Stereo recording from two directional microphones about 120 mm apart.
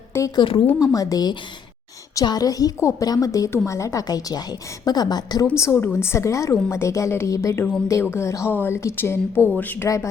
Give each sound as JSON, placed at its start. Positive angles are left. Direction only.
{"t": 0.3, "sound": "a woman's voice", "side_deg": 45}
{"t": 0.9, "sound": "a woman's voice", "side_deg": 35}